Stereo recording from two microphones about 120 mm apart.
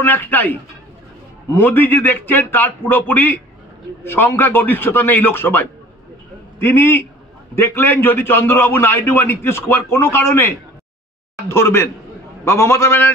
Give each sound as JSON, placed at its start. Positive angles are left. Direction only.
{"t": 0.0, "sound": "a man's voice", "side_deg": 15}
{"t": 11.4, "sound": "a man's voice", "side_deg": 20}